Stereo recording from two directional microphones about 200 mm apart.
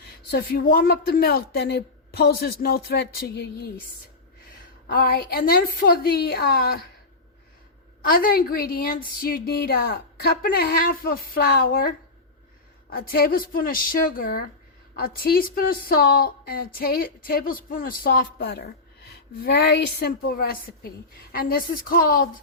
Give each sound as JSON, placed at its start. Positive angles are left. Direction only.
{"t": 0.0, "sound": "a woman's voice", "side_deg": 55}
{"t": 4.9, "sound": "a woman's voice", "side_deg": 45}
{"t": 8.0, "sound": "a woman's voice", "side_deg": 45}